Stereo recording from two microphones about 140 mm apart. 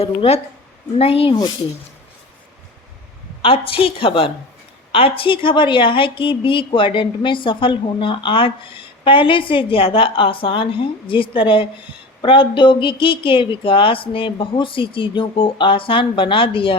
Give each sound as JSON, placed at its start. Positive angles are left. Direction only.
{"t": 0.0, "sound": "a woman's voice", "side_deg": 45}
{"t": 3.4, "sound": "a woman's voice", "side_deg": 40}